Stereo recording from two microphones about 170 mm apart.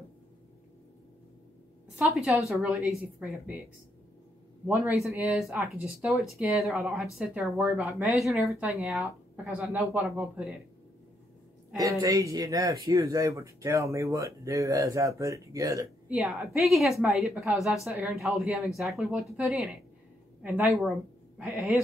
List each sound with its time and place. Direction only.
2.0 s a man's voice: centre (ahead or behind)
4.6 s a man's voice: 10° right (ahead or behind)
12.0 s speech: 20° right (ahead or behind)
16.1 s speech: centre (ahead or behind)